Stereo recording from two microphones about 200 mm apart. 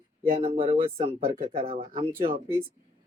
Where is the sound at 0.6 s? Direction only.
30° right (ahead or behind).